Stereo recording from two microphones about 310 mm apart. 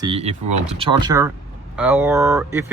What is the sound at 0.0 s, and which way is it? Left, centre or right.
Speech, centre.